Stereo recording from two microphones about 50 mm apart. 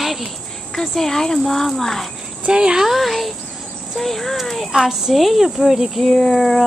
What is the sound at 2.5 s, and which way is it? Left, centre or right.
Speech, centre.